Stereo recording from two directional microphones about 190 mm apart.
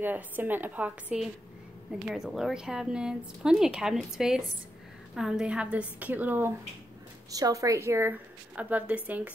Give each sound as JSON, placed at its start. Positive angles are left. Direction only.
{"t": 0.0, "sound": "a woman's voice", "side_deg": -10}